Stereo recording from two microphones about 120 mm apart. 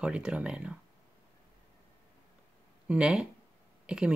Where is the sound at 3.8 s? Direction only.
5° right (ahead or behind).